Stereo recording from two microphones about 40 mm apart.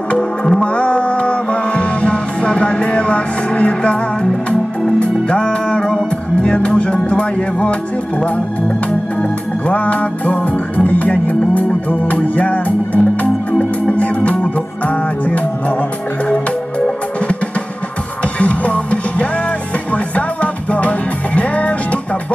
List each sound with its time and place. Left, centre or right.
0.5 s music: left
9.2 s music: left
18.4 s music: left
20.7 s music: left